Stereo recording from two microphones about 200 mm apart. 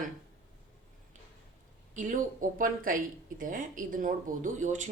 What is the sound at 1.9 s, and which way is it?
Speech, 40° right (ahead or behind).